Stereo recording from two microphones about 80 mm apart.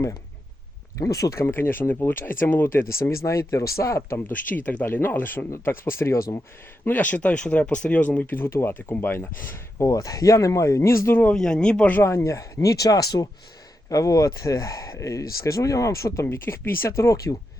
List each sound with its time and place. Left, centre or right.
0.9 s speech: left
4.4 s speech: left
6.8 s speech: left
9.8 s speech: left
11.3 s speech: centre
11.9 s speech: left